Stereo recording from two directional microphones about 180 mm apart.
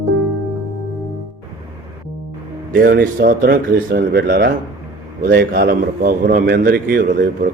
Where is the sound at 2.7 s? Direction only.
60° right (ahead or behind).